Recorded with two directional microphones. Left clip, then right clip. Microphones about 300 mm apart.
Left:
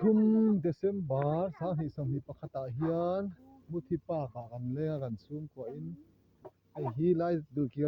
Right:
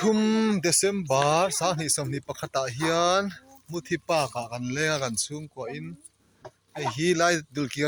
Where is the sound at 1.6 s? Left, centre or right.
Centre.